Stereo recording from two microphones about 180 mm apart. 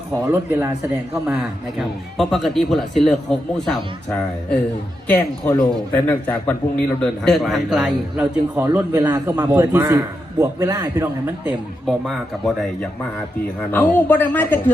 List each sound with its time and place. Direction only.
0.3 s a man's voice: 15° right (ahead or behind)
1.8 s speech: centre (ahead or behind)
5.0 s a man's voice: 10° left (ahead or behind); by 11.5 s 15° right (ahead or behind)
11.9 s speech: centre (ahead or behind)
13.7 s speech: 10° left (ahead or behind)